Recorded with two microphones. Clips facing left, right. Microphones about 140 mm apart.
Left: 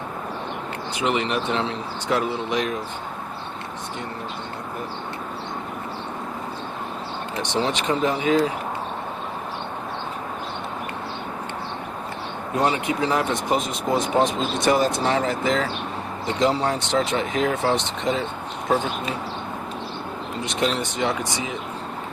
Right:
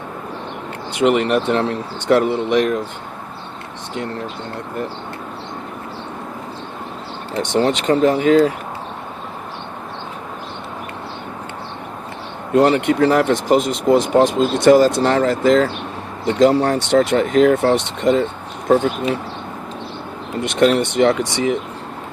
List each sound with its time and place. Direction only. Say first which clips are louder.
0.9 s speech: right 8 dB; 60° right (ahead or behind)
7.6 s speech: right 8 dB; 60° right (ahead or behind)
12.5 s speech: right 9 dB; 70° right (ahead or behind)
20.4 s speech: right 10 dB; 65° right (ahead or behind)